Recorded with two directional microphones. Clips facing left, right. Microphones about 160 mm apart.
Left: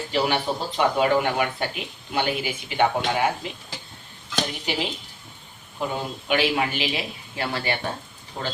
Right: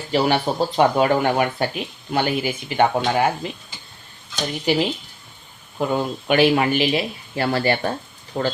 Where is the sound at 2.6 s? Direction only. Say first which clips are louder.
Right 3 dB; 40° right (ahead or behind).